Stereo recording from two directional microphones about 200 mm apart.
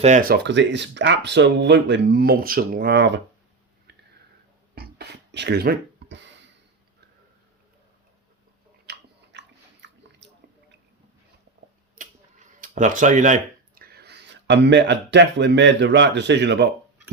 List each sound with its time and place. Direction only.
0.0 s speech: 40° right (ahead or behind); by 3.2 s 60° right (ahead or behind)
4.7 s a sound: 55° right (ahead or behind)
8.9 s chewing: 55° right (ahead or behind)
9.3 s biting: 60° right (ahead or behind)
9.8 s a sound: 65° right (ahead or behind)
12.5 s speech: 40° right (ahead or behind); by 16.6 s 60° right (ahead or behind)